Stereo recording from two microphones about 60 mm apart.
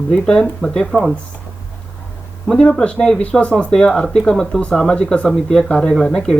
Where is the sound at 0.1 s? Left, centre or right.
Centre.